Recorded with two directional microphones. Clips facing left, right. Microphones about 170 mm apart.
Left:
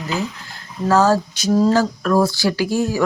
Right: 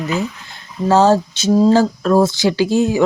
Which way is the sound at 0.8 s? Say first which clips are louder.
Right 3 dB; 25° right (ahead or behind).